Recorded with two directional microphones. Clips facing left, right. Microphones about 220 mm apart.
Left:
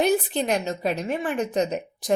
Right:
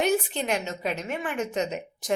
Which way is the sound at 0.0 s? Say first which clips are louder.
Left 3 dB; 35° left (ahead or behind).